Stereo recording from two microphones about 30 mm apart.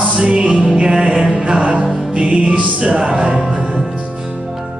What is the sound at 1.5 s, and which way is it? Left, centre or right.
Music, right.